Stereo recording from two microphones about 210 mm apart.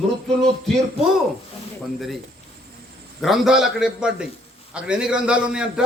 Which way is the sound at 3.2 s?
Centre (ahead or behind).